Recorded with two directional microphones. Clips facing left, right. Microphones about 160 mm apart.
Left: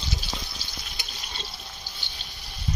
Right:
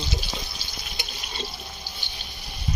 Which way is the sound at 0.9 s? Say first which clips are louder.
Right 7 dB; 10° right (ahead or behind).